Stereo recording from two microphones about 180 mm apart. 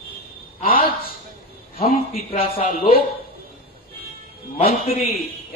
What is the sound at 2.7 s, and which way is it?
Speech, 50° left (ahead or behind).